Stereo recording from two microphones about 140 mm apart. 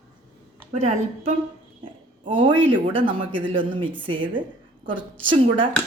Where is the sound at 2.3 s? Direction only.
35° right (ahead or behind).